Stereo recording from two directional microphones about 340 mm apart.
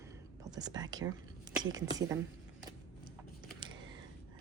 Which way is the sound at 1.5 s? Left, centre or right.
Centre.